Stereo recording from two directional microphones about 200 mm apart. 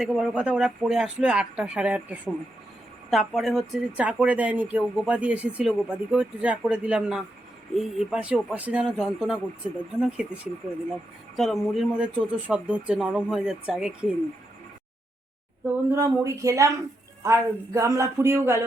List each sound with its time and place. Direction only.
0.0 s speech: 5° right (ahead or behind)
15.6 s speech: 15° right (ahead or behind)